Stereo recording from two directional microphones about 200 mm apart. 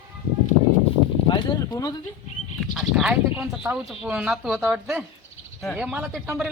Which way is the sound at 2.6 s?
Centre (ahead or behind).